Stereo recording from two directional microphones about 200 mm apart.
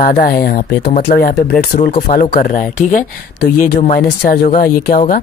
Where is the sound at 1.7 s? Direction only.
40° left (ahead or behind).